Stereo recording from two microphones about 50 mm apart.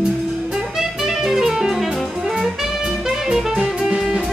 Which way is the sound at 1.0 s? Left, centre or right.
Centre.